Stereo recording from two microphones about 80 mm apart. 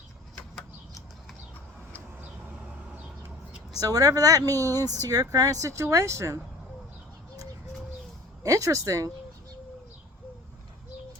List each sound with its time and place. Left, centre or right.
3.8 s speech: right
8.4 s speech: right